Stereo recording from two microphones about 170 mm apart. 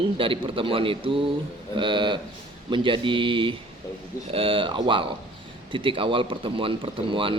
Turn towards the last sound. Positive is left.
turn(degrees=-30)  # may be behind; listen again after turning